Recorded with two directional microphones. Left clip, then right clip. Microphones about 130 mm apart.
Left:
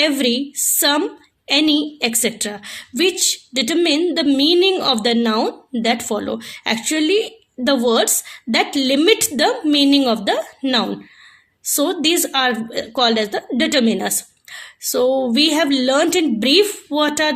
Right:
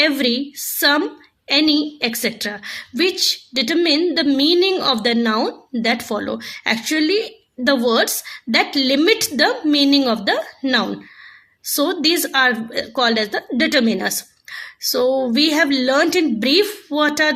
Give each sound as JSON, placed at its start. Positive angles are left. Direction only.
{"t": 0.0, "sound": "a woman's voice", "side_deg": 25}